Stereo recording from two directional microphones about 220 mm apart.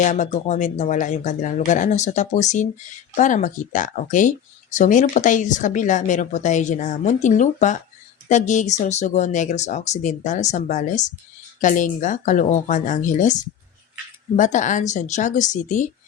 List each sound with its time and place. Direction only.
0.0 s speech: 35° left (ahead or behind)